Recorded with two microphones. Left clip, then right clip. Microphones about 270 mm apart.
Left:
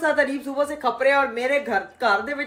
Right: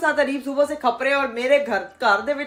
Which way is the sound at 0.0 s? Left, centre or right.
Centre.